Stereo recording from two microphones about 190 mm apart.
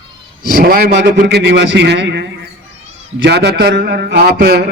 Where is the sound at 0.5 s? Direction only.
50° right (ahead or behind).